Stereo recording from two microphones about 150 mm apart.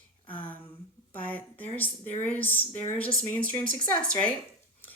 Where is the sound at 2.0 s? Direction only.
45° left (ahead or behind).